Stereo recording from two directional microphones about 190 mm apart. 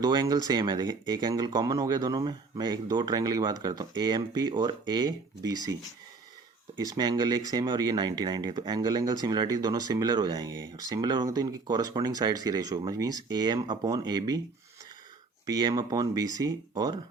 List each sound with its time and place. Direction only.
0.0 s speech: 20° right (ahead or behind)
6.8 s speech: 20° right (ahead or behind)
15.4 s speech: 20° right (ahead or behind)